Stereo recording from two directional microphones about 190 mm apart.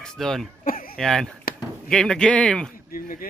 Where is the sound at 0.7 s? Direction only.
50° left (ahead or behind).